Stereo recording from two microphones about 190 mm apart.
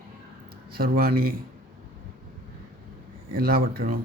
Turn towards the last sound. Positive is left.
turn(degrees=-50)  # may be behind; listen again after turning